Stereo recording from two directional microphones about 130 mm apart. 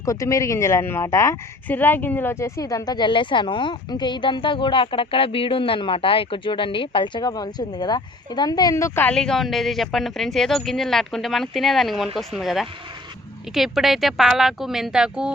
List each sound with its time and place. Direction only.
0.0 s speech: 25° left (ahead or behind)
9.0 s a woman's voice: 5° left (ahead or behind)